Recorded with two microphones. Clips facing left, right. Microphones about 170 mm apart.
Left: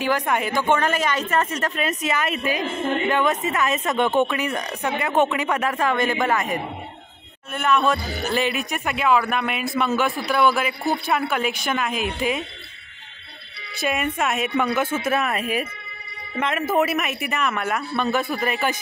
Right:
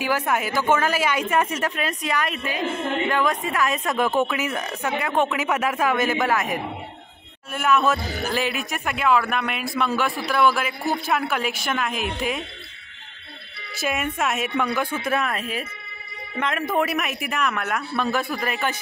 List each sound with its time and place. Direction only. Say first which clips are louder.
0.0 s a woman's voice: left 1 dB; 5° right (ahead or behind)
1.9 s a man's voice: left 2 dB; centre (ahead or behind)
13.7 s a man's voice: left 2 dB; centre (ahead or behind)